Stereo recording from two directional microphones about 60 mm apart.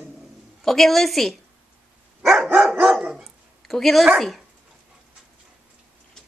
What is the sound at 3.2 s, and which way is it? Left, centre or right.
Dog, centre.